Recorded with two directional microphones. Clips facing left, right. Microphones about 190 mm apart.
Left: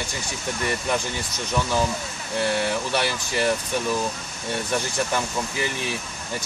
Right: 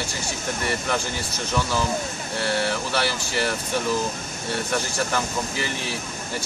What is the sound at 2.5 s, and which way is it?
Speech, 20° left (ahead or behind).